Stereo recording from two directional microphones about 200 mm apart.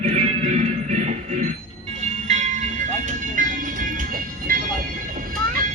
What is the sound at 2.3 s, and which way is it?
Music, 35° right (ahead or behind).